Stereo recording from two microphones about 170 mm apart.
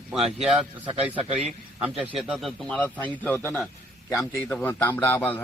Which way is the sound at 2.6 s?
10° left (ahead or behind).